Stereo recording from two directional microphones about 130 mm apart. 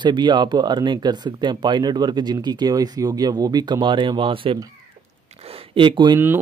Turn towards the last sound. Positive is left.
turn(degrees=-35)  # may be behind; listen again after turning